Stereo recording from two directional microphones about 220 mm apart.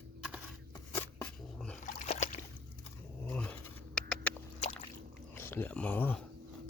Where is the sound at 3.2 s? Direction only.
5° left (ahead or behind).